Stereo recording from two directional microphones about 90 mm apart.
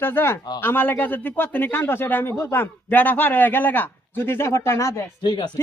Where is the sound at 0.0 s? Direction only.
25° left (ahead or behind).